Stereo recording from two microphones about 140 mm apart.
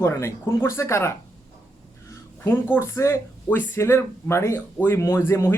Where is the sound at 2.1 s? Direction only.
20° left (ahead or behind).